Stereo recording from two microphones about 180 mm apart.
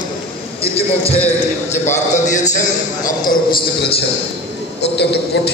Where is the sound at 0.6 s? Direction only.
35° left (ahead or behind).